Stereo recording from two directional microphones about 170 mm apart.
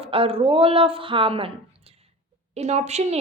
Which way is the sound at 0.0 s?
35° right (ahead or behind).